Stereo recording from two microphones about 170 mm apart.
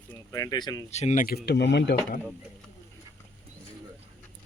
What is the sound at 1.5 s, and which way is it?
Speech, 85° left.